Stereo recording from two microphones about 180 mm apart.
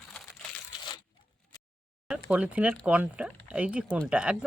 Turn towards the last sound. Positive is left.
turn(degrees=-5)  # may be behind; listen again after turning